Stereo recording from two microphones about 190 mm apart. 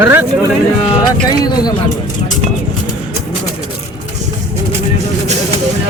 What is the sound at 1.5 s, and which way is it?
Speech, 20° left (ahead or behind).